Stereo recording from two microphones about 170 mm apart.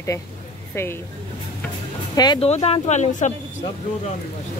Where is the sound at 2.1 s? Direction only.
25° left (ahead or behind).